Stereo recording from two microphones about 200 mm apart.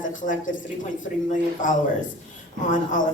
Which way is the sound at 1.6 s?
40° left (ahead or behind).